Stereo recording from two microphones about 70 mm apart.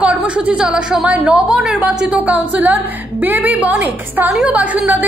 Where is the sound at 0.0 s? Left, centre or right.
Centre.